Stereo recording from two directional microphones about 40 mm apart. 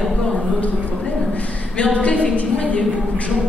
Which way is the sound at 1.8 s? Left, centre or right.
Left.